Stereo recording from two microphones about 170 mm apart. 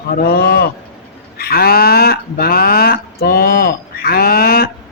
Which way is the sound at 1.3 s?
65° left (ahead or behind).